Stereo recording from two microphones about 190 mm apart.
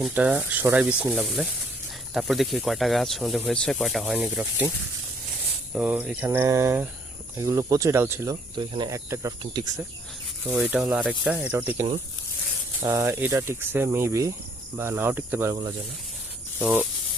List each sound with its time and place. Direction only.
0.0 s speech: 5° right (ahead or behind)
5.7 s speech: 5° right (ahead or behind); by 9.8 s 25° right (ahead or behind)
10.6 s speech: 10° right (ahead or behind)